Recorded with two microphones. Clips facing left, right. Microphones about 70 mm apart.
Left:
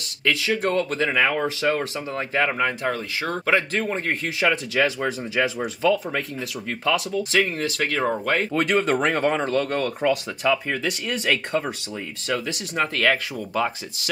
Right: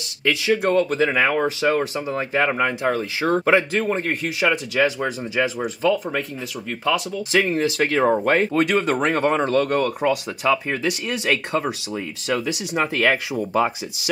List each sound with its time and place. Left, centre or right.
0.6 s speech: centre
8.5 s speech: centre; by 14.1 s right